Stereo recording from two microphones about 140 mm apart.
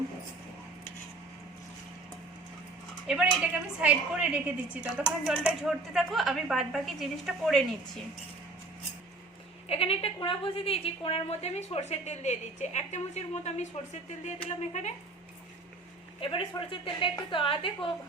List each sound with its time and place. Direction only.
3.1 s a woman's voice: 5° right (ahead or behind)
9.6 s a woman's voice: 45° left (ahead or behind)
16.2 s a woman's voice: 40° left (ahead or behind)